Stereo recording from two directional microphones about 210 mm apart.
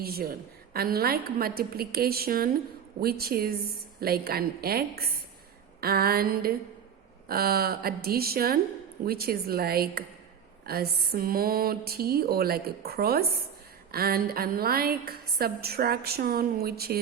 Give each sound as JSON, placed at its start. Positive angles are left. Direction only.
{"t": 0.0, "sound": "a woman's voice", "side_deg": -45}